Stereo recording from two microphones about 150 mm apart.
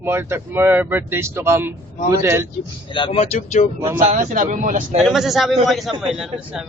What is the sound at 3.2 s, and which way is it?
Speech, 50° left (ahead or behind).